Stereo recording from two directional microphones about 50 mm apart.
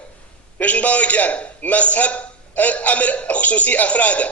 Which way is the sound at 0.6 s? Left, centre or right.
Left.